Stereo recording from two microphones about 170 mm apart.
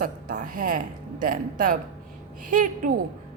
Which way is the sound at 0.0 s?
55° right (ahead or behind).